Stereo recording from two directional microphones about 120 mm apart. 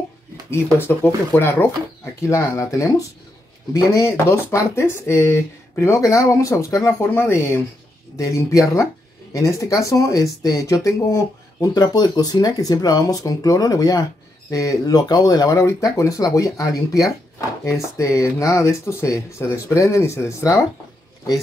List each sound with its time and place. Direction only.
0.5 s speech: 20° left (ahead or behind)